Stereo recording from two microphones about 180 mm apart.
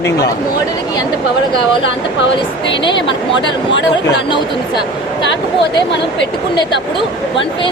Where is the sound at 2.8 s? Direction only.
25° left (ahead or behind).